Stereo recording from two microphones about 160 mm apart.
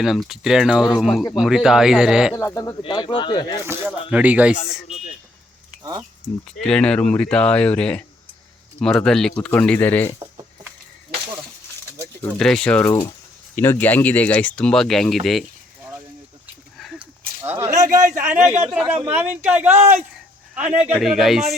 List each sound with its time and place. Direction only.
0.0 s speech: centre (ahead or behind)
2.3 s speech: 20° left (ahead or behind)
2.8 s speech: 30° left (ahead or behind)
3.6 s speech: 15° right (ahead or behind)
6.4 s speech: 5° left (ahead or behind)
12.4 s speech: 5° left (ahead or behind)
12.8 s speech: 20° left (ahead or behind); by 15.4 s centre (ahead or behind)
16.7 s a sound: centre (ahead or behind)
17.4 s speech: 15° right (ahead or behind)
17.7 s speech: 50° right (ahead or behind)
18.5 s speech: 10° right (ahead or behind)
19.7 s a man's voice: 40° right (ahead or behind)
20.7 s speech: 10° right (ahead or behind)